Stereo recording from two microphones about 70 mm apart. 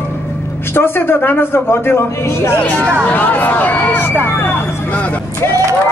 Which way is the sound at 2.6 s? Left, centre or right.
Centre.